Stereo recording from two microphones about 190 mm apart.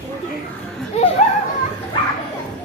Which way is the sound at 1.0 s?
35° left (ahead or behind).